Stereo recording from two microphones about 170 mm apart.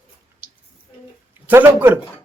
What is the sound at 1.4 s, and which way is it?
Speech, 10° right (ahead or behind).